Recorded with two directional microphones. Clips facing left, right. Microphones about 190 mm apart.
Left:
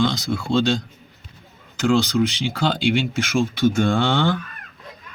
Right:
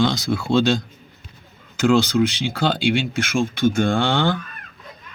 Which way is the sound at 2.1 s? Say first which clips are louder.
Right 1 dB; 50° right (ahead or behind).